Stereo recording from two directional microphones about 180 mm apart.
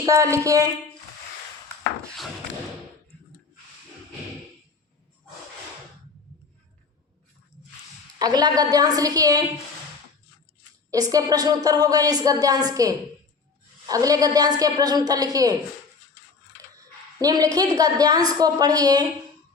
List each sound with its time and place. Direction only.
0.0 s speech: 15° right (ahead or behind)
8.2 s speech: 20° right (ahead or behind)
10.9 s speech: 20° right (ahead or behind)
17.2 s speech: 20° right (ahead or behind)